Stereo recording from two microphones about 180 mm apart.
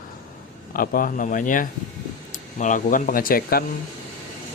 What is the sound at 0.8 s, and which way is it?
Speech, 50° left (ahead or behind).